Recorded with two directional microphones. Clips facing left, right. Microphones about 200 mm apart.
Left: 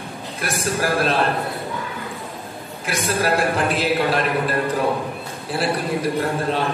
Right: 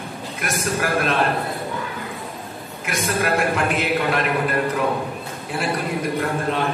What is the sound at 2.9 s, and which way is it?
A man's voice, 35° left (ahead or behind).